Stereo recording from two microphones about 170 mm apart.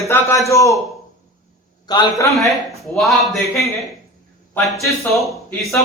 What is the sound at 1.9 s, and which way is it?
Speech, 25° left (ahead or behind).